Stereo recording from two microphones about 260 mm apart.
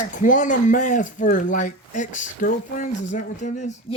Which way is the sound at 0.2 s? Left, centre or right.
Left.